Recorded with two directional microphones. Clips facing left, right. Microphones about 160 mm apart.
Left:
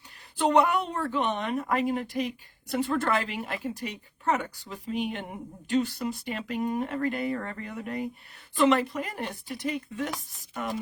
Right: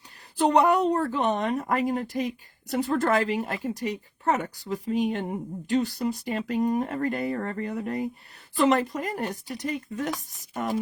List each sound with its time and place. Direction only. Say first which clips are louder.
0.3 s speech: right 3 dB; 35° right (ahead or behind)